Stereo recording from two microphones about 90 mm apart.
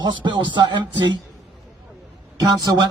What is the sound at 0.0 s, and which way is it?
Speech, 60° right (ahead or behind).